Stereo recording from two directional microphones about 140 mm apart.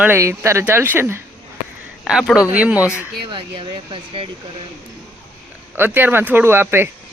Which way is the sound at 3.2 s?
35° right (ahead or behind).